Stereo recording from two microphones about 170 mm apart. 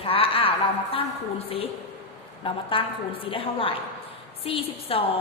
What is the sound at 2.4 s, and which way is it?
A woman's voice, 30° left (ahead or behind).